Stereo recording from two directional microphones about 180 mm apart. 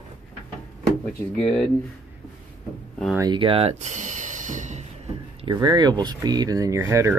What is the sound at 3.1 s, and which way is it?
Speech, 25° right (ahead or behind).